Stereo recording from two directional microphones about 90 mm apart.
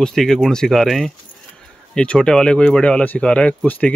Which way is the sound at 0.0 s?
5° left (ahead or behind).